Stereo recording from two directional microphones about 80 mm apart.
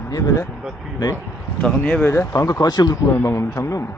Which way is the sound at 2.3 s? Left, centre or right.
Left.